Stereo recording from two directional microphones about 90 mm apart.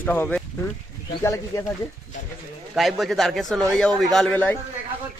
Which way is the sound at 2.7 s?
Centre (ahead or behind).